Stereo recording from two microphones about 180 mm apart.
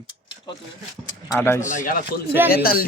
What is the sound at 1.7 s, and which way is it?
Speech, 50° left (ahead or behind).